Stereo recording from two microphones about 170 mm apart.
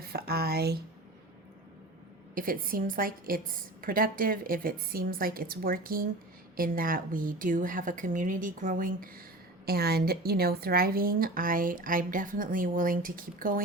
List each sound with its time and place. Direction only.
0.1 s speech: 65° right (ahead or behind)
2.3 s a woman's voice: 55° right (ahead or behind)
9.6 s a woman's voice: 65° right (ahead or behind)